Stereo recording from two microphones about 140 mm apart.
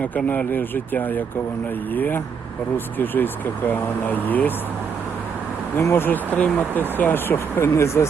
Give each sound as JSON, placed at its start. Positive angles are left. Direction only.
{"t": 0.0, "sound": "speech", "side_deg": 10}
{"t": 5.7, "sound": "speech", "side_deg": 15}